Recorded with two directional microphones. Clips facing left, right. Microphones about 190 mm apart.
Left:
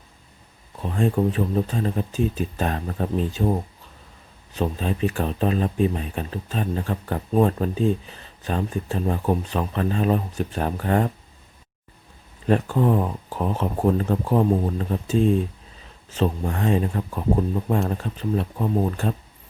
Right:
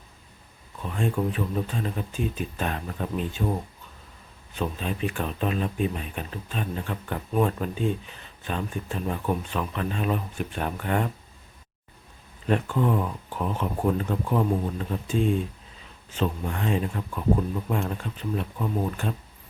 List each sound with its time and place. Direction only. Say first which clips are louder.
0.8 s speech: left 5 dB; 35° left (ahead or behind)
4.5 s speech: left 5 dB; 35° left (ahead or behind)
12.5 s speech: left 4 dB; 35° left (ahead or behind)